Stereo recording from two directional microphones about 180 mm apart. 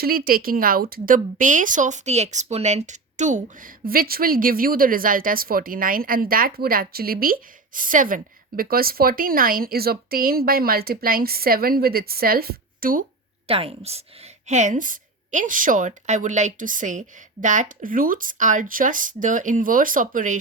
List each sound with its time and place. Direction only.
0.0 s speech: 55° right (ahead or behind)
13.5 s a woman's voice: 30° right (ahead or behind)